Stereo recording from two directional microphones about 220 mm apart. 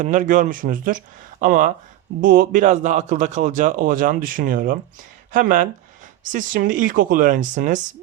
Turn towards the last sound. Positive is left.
turn(degrees=-35)  # may be behind; listen again after turning